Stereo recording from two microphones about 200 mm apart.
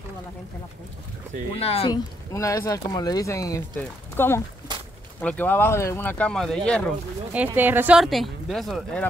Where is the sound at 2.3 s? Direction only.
15° left (ahead or behind).